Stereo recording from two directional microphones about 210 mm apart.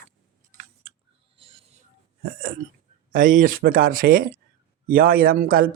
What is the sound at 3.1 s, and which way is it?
Speech, 40° right (ahead or behind).